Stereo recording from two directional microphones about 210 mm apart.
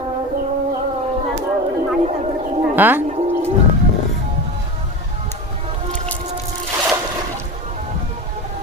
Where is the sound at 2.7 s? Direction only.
10° right (ahead or behind).